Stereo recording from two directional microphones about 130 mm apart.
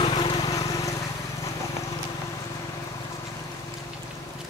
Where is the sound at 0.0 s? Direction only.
40° left (ahead or behind).